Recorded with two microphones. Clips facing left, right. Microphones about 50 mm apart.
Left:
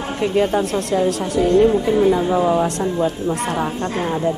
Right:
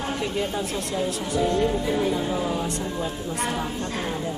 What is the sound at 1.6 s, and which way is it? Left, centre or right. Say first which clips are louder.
A woman's voice: left 9 dB; left.